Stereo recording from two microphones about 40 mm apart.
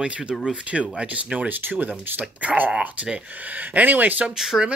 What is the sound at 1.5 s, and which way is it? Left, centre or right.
Speech, right.